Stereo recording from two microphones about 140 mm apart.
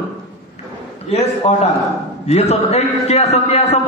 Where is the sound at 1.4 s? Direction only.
50° left (ahead or behind).